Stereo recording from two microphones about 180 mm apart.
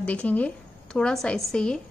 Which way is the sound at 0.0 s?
5° left (ahead or behind).